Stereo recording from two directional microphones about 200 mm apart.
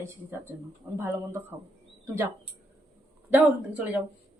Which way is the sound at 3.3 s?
10° right (ahead or behind).